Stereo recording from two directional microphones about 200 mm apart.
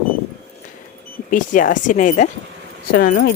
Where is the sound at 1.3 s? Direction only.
40° left (ahead or behind).